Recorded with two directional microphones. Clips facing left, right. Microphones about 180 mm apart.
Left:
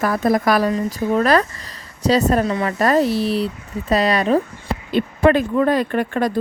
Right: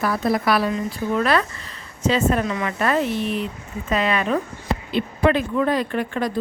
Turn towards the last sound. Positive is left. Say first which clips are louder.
# left 4 dB
turn(degrees=50)  # may be behind; listen again after turning